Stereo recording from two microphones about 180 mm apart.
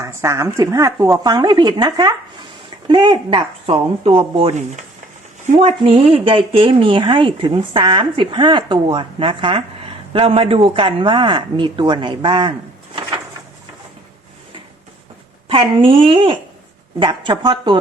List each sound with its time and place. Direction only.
0.0 s a woman's voice: 15° right (ahead or behind)
15.4 s speech: 30° right (ahead or behind)